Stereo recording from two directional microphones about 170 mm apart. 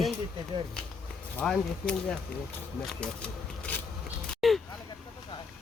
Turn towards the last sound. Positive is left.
turn(degrees=0)  # may be behind; listen again after turning